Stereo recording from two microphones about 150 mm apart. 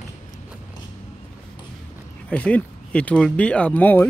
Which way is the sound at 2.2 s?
10° left (ahead or behind).